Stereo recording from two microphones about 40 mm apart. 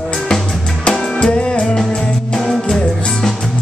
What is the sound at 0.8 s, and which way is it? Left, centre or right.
Music, left.